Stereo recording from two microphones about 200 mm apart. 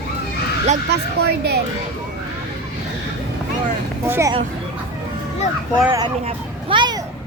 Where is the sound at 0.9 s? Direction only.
55° right (ahead or behind).